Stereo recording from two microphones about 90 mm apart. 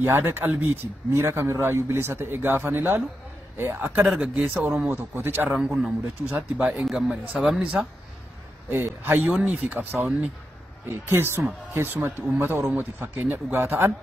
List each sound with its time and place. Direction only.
0.0 s speech: 25° right (ahead or behind)
4.0 s speech: 5° right (ahead or behind)
4.8 s speech: 25° right (ahead or behind)
5.5 s speech: 10° right (ahead or behind)
8.6 s speech: 25° right (ahead or behind)
9.3 s speech: 5° right (ahead or behind)
9.7 s speech: 20° right (ahead or behind)
10.9 s speech: 25° right (ahead or behind)